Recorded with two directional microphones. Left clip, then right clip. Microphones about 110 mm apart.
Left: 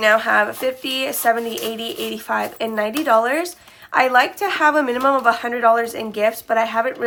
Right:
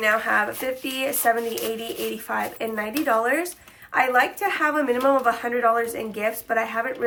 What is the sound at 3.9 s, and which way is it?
A woman's voice, 45° left (ahead or behind).